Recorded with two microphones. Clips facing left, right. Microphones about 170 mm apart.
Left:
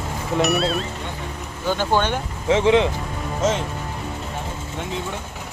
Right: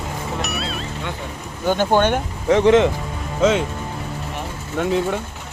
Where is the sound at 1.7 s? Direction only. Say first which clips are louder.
Right 4 dB; 50° right (ahead or behind).